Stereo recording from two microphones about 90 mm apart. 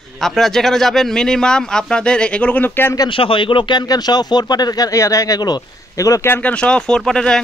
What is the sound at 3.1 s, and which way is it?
Speech, 75° left (ahead or behind).